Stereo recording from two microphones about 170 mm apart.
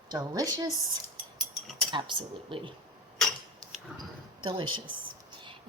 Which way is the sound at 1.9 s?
25° right (ahead or behind).